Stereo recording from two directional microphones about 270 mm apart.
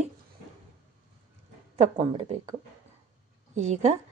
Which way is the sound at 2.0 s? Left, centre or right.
Right.